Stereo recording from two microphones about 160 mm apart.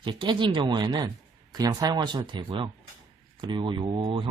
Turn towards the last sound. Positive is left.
turn(degrees=-30)  # may be behind; listen again after turning